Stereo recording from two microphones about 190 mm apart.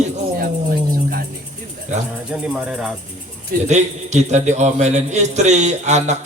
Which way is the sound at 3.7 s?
40° right (ahead or behind).